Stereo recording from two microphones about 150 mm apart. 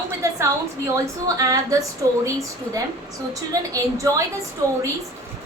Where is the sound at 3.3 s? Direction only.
20° right (ahead or behind).